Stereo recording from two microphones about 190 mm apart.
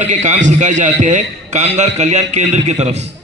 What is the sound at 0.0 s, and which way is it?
A man's voice, 40° right (ahead or behind).